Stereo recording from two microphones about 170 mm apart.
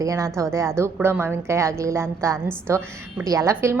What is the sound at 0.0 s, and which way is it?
A woman's voice, 20° right (ahead or behind).